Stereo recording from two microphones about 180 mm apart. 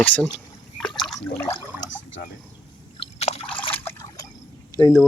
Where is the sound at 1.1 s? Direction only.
Centre (ahead or behind).